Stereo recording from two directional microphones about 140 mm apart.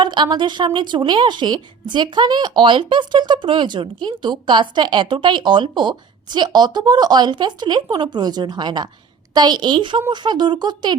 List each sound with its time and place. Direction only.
0.0 s a woman's voice: 35° right (ahead or behind)